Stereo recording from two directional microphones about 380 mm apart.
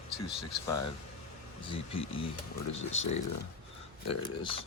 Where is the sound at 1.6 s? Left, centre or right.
Centre.